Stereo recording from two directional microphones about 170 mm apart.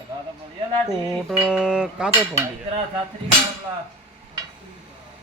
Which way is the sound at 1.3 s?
5° right (ahead or behind).